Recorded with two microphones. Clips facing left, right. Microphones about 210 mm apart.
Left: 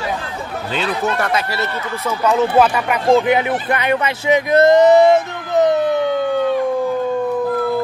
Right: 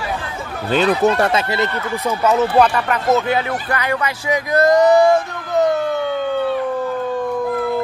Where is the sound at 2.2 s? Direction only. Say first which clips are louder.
Left 1 dB; centre (ahead or behind); by 5.9 s 20° left (ahead or behind).